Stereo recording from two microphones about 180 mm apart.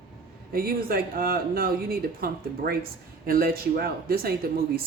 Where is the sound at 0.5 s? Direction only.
55° right (ahead or behind).